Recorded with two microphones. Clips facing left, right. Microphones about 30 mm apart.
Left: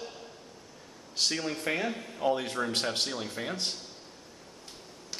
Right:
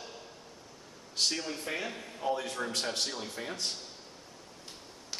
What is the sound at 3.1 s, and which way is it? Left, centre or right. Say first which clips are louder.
Speech: left 3 dB; centre.